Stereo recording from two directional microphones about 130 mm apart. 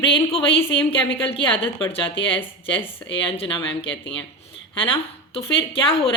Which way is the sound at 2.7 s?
15° left (ahead or behind).